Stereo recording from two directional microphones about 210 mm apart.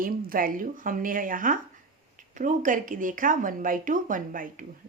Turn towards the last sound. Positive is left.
turn(degrees=-40)  # may be behind; listen again after turning